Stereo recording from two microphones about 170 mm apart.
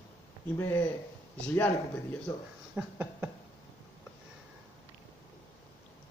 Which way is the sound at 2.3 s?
20° left (ahead or behind).